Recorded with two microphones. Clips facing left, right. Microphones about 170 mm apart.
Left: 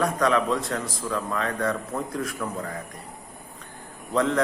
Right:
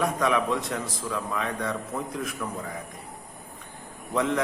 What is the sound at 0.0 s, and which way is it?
A man's voice, 15° right (ahead or behind).